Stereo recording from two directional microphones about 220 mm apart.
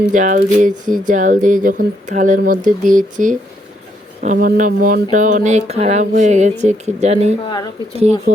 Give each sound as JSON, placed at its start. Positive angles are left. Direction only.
{"t": 0.1, "sound": "speech", "side_deg": -35}
{"t": 7.4, "sound": "speech", "side_deg": 20}